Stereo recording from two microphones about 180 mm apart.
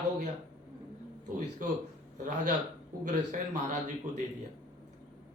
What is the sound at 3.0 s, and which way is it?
A man's voice, 45° right (ahead or behind).